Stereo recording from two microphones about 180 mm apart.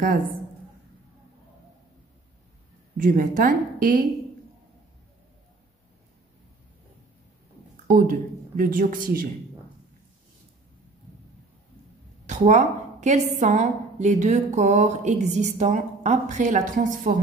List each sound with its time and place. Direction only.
3.0 s speech: 50° right (ahead or behind)
7.9 s speech: 50° right (ahead or behind)
12.3 s a woman's voice: 40° right (ahead or behind)